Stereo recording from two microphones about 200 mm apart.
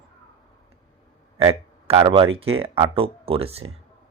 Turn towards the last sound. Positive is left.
turn(degrees=-30)  # may be behind; listen again after turning